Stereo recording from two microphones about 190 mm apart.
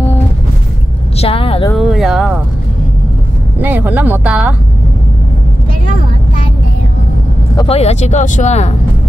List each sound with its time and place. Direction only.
1.1 s vehicle: 30° left (ahead or behind)
1.8 s speech: centre (ahead or behind)
3.6 s speech: 10° right (ahead or behind)
7.6 s speech: 35° left (ahead or behind)